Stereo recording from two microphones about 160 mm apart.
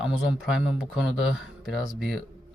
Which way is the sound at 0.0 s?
5° right (ahead or behind).